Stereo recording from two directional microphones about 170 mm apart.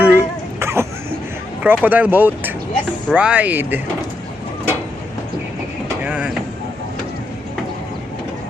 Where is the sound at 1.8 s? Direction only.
10° right (ahead or behind).